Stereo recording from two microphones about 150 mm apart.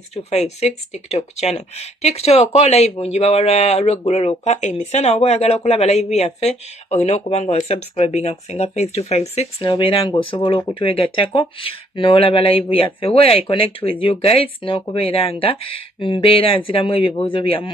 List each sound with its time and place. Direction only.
0.1 s speech: 45° left (ahead or behind)